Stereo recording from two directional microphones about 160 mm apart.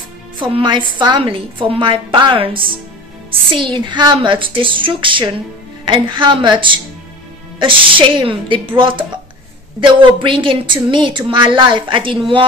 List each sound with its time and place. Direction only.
0.4 s a woman's voice: 30° right (ahead or behind)
8.2 s a woman's voice: 30° right (ahead or behind)